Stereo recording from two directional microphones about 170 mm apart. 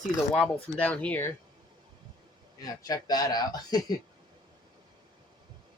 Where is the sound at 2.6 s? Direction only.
20° left (ahead or behind).